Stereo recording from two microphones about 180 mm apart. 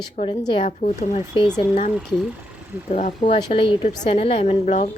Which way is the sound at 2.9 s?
40° left (ahead or behind).